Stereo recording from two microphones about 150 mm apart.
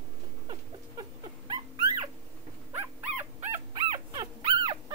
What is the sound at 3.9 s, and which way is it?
Dog, 30° right (ahead or behind).